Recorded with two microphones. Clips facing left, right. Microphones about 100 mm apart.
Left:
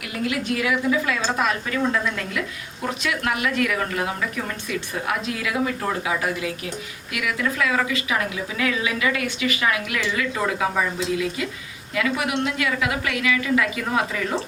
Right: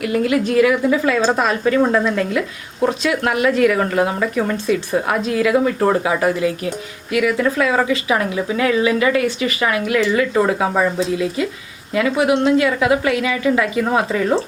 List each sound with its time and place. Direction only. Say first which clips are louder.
0.0 s speech: right 9 dB; 40° right (ahead or behind)